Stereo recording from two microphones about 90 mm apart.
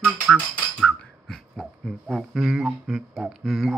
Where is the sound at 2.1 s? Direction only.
5° right (ahead or behind).